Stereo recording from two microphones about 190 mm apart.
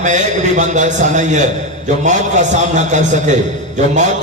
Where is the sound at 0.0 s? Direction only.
40° right (ahead or behind).